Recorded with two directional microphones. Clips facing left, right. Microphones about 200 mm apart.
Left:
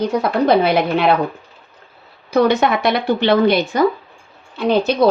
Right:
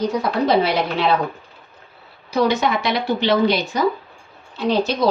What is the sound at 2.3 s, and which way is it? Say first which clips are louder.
A woman's voice: left 4 dB; 55° left (ahead or behind).